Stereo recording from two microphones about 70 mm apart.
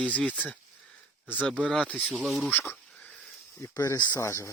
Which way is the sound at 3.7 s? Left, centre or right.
Left.